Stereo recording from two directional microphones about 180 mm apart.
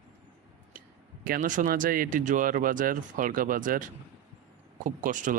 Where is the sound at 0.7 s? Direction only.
50° right (ahead or behind).